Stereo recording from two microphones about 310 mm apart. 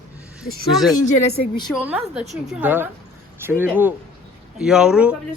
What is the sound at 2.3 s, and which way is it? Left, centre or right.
A man's voice, centre.